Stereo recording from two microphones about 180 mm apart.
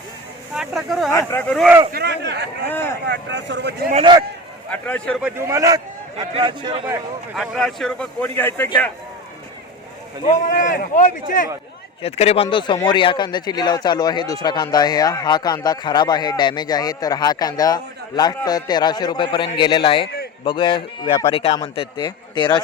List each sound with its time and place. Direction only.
0.5 s speech: 5° right (ahead or behind)
1.1 s a man's voice: 10° left (ahead or behind)
1.9 s speech: 65° right (ahead or behind)
2.6 s a man's voice: 10° left (ahead or behind)
3.1 s speech: 85° right
3.9 s a man's voice: 25° right (ahead or behind)
4.7 s a man's voice: 10° left (ahead or behind)
5.2 s a man's voice: 15° right (ahead or behind)
7.3 s a man's voice: centre (ahead or behind)
10.2 s a man's voice: 45° left (ahead or behind)
12.0 s speech: 35° left (ahead or behind)